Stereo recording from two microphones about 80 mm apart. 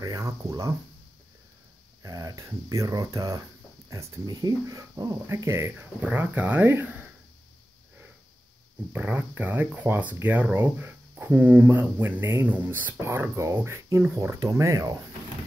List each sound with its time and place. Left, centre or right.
0.0 s speech: right
2.0 s speech: right
4.3 s speech: right
5.3 s speech: right
8.9 s speech: right